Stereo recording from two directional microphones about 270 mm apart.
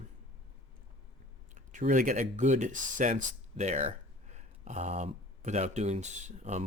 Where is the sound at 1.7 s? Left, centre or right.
Right.